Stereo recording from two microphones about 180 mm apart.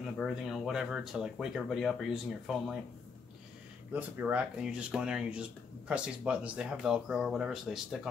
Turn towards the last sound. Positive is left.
turn(degrees=0)  # may be behind; listen again after turning